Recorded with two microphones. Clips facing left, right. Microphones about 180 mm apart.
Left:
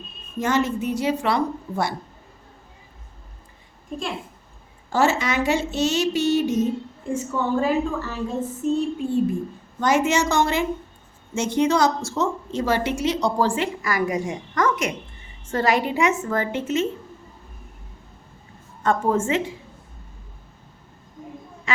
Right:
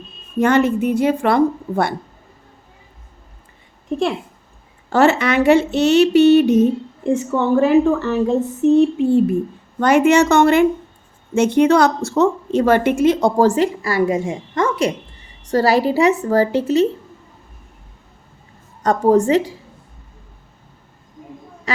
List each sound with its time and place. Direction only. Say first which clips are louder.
0.3 s speech: right 7 dB; 60° right (ahead or behind)
3.8 s a woman's voice: right 10 dB; 70° right (ahead or behind)
7.5 s a sound: right 10 dB; 70° right (ahead or behind)
9.8 s a woman's voice: right 7 dB; 60° right (ahead or behind); by 16.8 s 35° right (ahead or behind)
18.8 s a woman's voice: right 7 dB; 40° right (ahead or behind)